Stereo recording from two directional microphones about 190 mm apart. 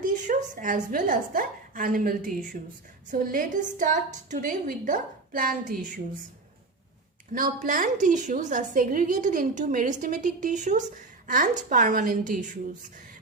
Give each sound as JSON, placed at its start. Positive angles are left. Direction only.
{"t": 0.0, "sound": "a sound", "side_deg": -45}
{"t": 0.9, "sound": "a woman's voice", "side_deg": -45}
{"t": 7.3, "sound": "a woman's voice", "side_deg": -45}